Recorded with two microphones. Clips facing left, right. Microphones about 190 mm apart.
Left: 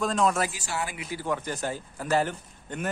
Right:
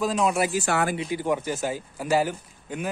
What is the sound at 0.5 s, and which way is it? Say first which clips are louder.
Speech: right 9 dB; 55° right (ahead or behind).